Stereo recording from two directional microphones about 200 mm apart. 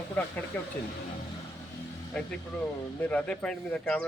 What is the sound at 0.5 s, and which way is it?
Speech, 10° left (ahead or behind).